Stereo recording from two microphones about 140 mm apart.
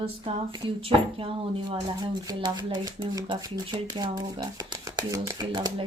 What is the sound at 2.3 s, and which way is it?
Speech, 30° right (ahead or behind).